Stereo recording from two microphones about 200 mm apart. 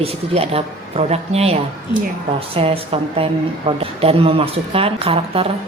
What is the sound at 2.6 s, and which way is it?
A man's voice, 30° right (ahead or behind).